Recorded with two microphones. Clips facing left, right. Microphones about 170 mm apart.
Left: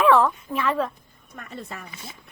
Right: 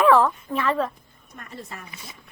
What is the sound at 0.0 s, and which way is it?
Speech, centre (ahead or behind).